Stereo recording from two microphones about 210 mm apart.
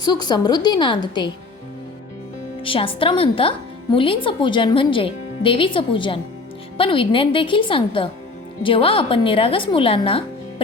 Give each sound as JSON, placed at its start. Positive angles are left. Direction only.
{"t": 0.0, "sound": "speech", "side_deg": 20}
{"t": 2.6, "sound": "speech", "side_deg": 25}